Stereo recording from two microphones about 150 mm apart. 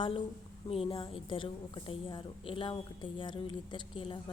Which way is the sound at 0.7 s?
40° left (ahead or behind).